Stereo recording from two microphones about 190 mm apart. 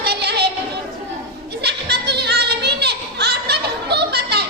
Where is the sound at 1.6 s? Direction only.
60° right (ahead or behind).